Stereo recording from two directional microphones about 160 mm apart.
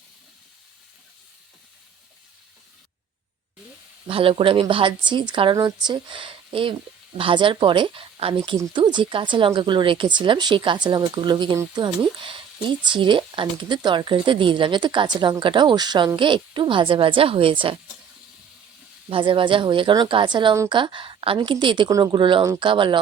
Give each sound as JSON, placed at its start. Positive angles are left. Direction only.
{"t": 4.0, "sound": "speech", "side_deg": -35}
{"t": 8.5, "sound": "speech", "side_deg": -20}
{"t": 19.1, "sound": "speech", "side_deg": -30}